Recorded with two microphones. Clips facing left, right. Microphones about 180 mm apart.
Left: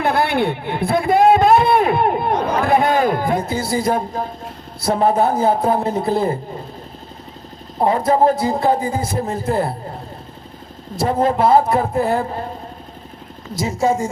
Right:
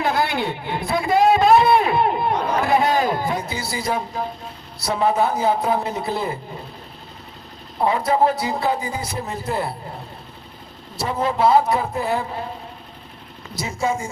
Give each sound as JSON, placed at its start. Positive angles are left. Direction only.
{"t": 0.0, "sound": "a sound", "side_deg": 55}
{"t": 4.8, "sound": "speech", "side_deg": 50}
{"t": 7.8, "sound": "speech", "side_deg": 45}
{"t": 10.9, "sound": "speech", "side_deg": 50}
{"t": 13.6, "sound": "a woman's voice", "side_deg": 40}